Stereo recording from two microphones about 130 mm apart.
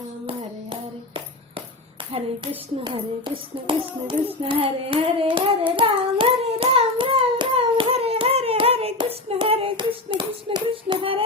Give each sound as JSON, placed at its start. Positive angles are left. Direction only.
{"t": 0.3, "sound": "music", "side_deg": -40}
{"t": 2.8, "sound": "a child's voice", "side_deg": -40}
{"t": 4.4, "sound": "child singing", "side_deg": -45}
{"t": 10.2, "sound": "hands", "side_deg": -35}